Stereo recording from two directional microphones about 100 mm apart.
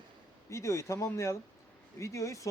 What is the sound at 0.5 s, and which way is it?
A man's voice, 30° left (ahead or behind).